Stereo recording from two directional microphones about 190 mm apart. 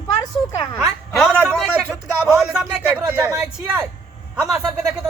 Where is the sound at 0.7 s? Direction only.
Centre (ahead or behind).